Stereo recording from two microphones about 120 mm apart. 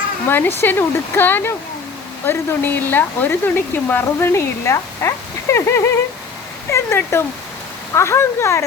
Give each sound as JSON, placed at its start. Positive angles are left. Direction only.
{"t": 0.3, "sound": "speech", "side_deg": 20}